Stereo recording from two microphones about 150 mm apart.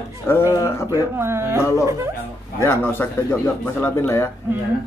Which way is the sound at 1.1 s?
15° right (ahead or behind).